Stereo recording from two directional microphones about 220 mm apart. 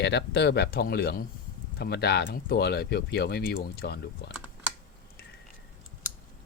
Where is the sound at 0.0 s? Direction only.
50° left (ahead or behind).